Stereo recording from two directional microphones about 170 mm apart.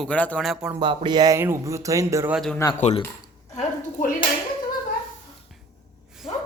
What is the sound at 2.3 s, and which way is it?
Speech, centre (ahead or behind).